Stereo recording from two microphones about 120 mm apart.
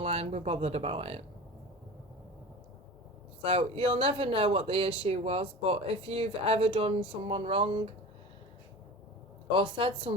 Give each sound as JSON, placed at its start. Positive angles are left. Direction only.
{"t": 0.0, "sound": "speech", "side_deg": -60}
{"t": 3.4, "sound": "speech", "side_deg": -50}
{"t": 9.5, "sound": "speech", "side_deg": -45}